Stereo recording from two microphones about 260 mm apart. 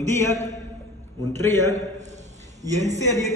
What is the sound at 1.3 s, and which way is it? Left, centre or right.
Speech, centre.